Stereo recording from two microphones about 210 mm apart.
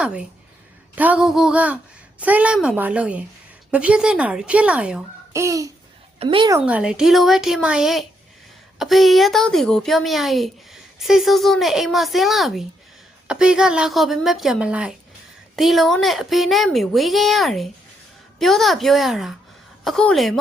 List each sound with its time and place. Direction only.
0.0 s a woman's voice: 5° right (ahead or behind); by 6.7 s 25° right (ahead or behind)
6.7 s a woman's voice: 5° right (ahead or behind)